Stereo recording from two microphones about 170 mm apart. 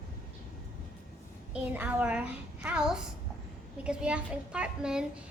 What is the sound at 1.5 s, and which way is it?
A woman's voice, 10° right (ahead or behind).